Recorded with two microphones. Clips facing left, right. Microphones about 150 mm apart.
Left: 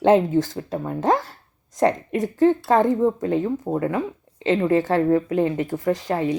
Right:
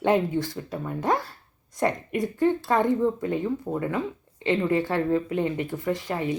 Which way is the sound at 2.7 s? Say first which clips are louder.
Left 4 dB; 20° left (ahead or behind).